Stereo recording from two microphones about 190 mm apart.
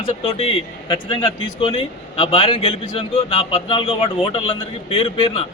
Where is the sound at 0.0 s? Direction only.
30° left (ahead or behind).